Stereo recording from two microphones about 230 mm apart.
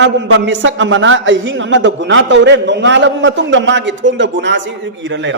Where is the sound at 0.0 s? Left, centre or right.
Right.